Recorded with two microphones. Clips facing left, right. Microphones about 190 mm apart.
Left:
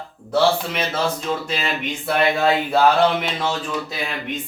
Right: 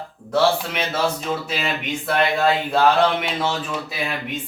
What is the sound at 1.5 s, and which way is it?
Speech, centre (ahead or behind).